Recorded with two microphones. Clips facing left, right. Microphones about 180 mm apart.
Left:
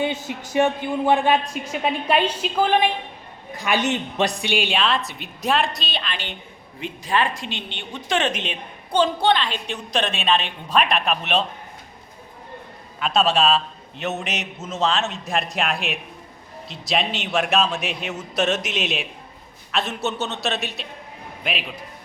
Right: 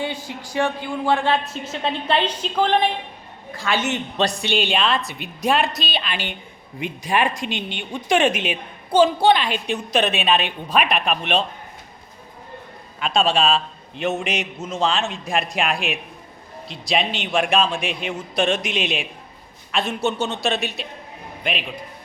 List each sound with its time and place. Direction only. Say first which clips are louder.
0.0 s speech: left 3 dB; 20° left (ahead or behind)
3.6 s speech: left 1 dB; 15° left (ahead or behind)
4.7 s a man's voice: right 1 dB; centre (ahead or behind)
13.0 s a man's voice: even; 5° left (ahead or behind)